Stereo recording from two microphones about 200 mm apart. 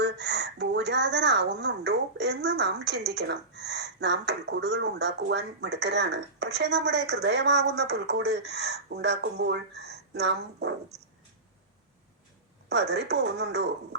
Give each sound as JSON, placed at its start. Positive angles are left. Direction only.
{"t": 0.0, "sound": "speech", "side_deg": -60}
{"t": 12.6, "sound": "speech", "side_deg": -55}